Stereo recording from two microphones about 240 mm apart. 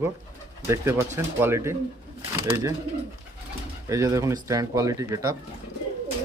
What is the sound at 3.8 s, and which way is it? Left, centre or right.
Speech, centre.